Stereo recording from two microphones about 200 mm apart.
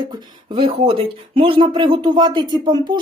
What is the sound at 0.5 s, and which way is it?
A woman's voice, 25° right (ahead or behind).